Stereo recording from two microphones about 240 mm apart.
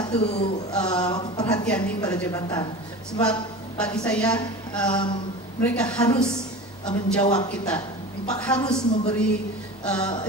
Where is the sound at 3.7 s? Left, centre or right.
Centre.